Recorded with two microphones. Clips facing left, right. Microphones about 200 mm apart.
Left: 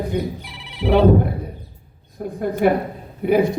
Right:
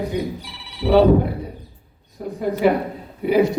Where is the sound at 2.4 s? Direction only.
55° left (ahead or behind).